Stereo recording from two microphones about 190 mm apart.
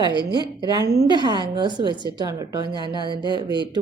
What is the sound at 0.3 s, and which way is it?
A woman's voice, 20° right (ahead or behind).